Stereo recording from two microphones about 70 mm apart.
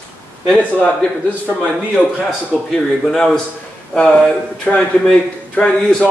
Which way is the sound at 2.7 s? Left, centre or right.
Centre.